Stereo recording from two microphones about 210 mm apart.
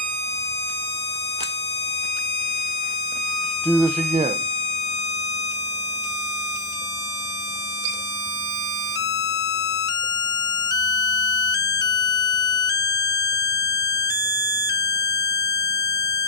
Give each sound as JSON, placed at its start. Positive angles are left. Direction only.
{"t": 3.7, "sound": "speech", "side_deg": -10}
{"t": 12.8, "sound": "smoke detector", "side_deg": 15}
{"t": 14.7, "sound": "a sound", "side_deg": 15}